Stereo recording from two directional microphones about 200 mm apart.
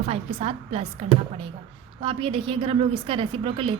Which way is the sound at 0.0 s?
30° right (ahead or behind).